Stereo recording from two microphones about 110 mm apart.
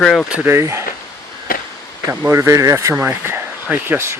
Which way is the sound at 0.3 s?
10° right (ahead or behind).